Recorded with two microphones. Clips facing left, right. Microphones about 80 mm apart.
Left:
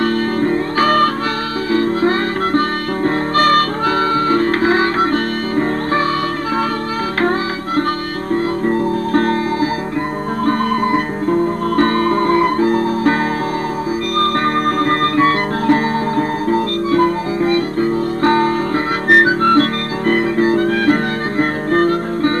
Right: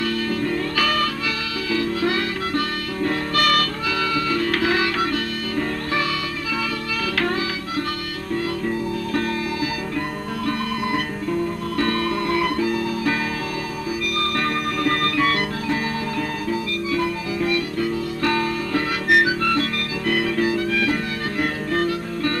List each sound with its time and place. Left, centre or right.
0.0 s music: left
7.2 s music: left
14.1 s music: left